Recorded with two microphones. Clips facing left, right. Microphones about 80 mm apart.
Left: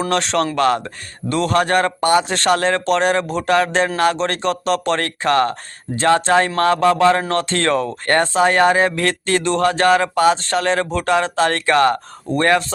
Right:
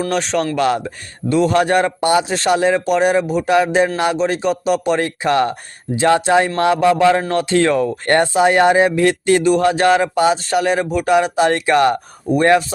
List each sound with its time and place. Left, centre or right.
0.1 s speech: centre
2.2 s speech: centre